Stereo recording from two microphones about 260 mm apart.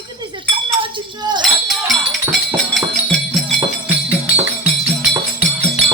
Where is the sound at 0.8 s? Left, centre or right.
Centre.